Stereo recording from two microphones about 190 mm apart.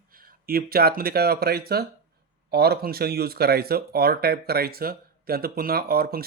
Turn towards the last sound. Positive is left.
turn(degrees=-55)  # may be behind; listen again after turning